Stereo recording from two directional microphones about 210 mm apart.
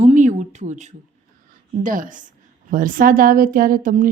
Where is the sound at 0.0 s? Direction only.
35° right (ahead or behind).